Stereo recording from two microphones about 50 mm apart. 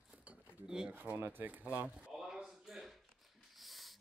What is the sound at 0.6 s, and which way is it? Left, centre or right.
Speech, centre.